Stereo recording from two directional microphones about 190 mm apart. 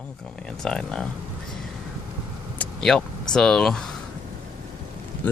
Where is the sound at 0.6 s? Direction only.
5° left (ahead or behind).